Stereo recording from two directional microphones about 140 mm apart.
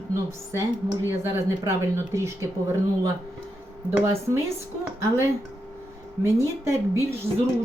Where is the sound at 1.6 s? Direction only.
20° right (ahead or behind).